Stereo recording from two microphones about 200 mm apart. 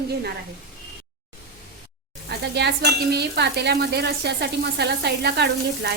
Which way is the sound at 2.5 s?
55° right (ahead or behind).